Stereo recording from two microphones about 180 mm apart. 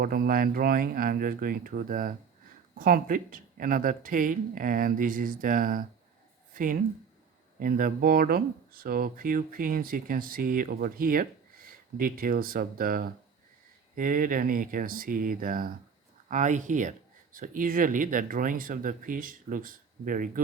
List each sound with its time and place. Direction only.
0.0 s speech: 55° right (ahead or behind)
6.5 s a sound: 50° right (ahead or behind)
7.6 s speech: 55° right (ahead or behind)